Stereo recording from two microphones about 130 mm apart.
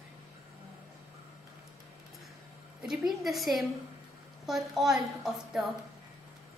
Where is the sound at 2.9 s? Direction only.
Centre (ahead or behind).